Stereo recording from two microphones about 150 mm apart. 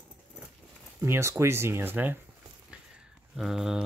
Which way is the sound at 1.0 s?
20° right (ahead or behind).